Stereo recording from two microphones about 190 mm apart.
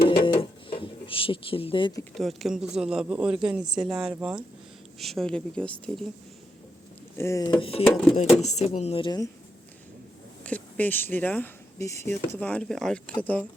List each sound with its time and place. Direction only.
0.0 s music: 25° left (ahead or behind)
2.1 s speech: centre (ahead or behind)
7.2 s speech: 15° left (ahead or behind)
7.6 s speech: 30° left (ahead or behind)
10.4 s speech: 10° left (ahead or behind)